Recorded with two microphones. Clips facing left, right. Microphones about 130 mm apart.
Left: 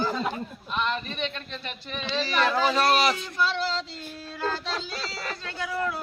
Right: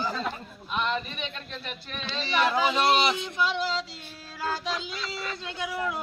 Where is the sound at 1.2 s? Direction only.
Centre (ahead or behind).